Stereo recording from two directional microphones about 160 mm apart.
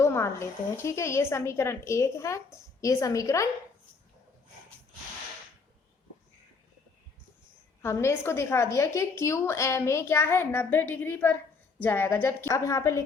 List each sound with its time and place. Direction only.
0.0 s a woman's voice: 15° left (ahead or behind)
7.8 s a woman's voice: 15° left (ahead or behind)